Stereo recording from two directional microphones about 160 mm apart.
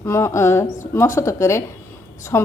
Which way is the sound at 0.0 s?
15° left (ahead or behind).